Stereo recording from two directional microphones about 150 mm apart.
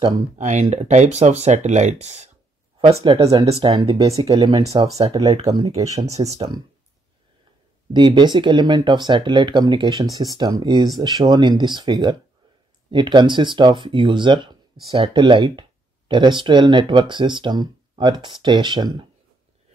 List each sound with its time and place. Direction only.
0.4 s speech: 50° right (ahead or behind)
2.8 s speech: 40° right (ahead or behind); by 5.0 s 25° right (ahead or behind)
5.2 s speech: 45° right (ahead or behind)
6.0 s speech: 20° right (ahead or behind)
7.9 s speech: 30° right (ahead or behind)